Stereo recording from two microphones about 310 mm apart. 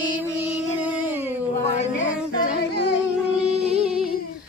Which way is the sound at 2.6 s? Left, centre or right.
Left.